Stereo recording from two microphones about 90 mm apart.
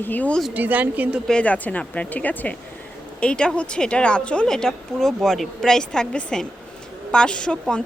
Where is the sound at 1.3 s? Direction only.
15° left (ahead or behind).